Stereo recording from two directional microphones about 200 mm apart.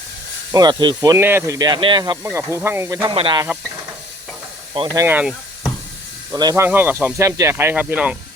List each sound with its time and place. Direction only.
0.5 s speech: 20° right (ahead or behind)
4.9 s speech: 10° right (ahead or behind)
6.3 s speech: 20° right (ahead or behind)